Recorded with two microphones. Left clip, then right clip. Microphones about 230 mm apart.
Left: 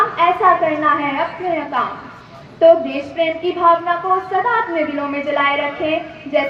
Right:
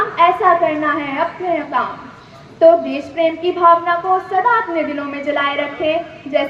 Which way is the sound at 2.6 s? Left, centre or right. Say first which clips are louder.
Even; right.